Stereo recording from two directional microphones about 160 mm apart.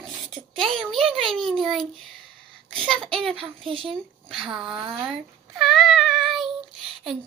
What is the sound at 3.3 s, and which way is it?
Speech, 35° right (ahead or behind).